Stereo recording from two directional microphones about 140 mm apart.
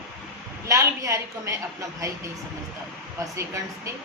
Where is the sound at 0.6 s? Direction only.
20° right (ahead or behind).